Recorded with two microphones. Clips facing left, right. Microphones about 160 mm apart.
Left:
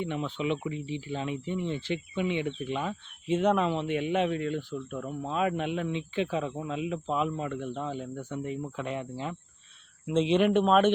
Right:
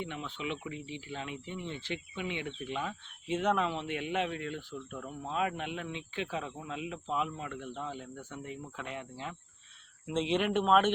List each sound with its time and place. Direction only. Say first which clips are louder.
0.2 s speech: left 8 dB; 35° left (ahead or behind)
4.7 s speech: left 7 dB; 35° left (ahead or behind)